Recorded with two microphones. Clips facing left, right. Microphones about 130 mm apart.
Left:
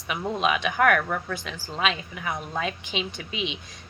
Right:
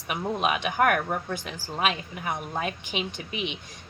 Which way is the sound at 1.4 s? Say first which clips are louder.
Even; 15° right (ahead or behind).